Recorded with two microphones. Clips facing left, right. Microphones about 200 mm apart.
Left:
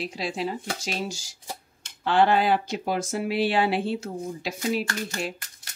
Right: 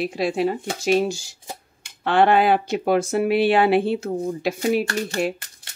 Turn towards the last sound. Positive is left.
turn(degrees=-55)  # may be behind; listen again after turning